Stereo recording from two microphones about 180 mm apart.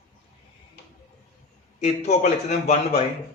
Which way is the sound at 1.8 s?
40° left (ahead or behind).